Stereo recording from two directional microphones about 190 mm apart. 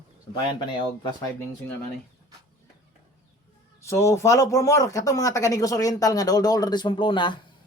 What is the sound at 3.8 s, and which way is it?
Speech, 15° left (ahead or behind).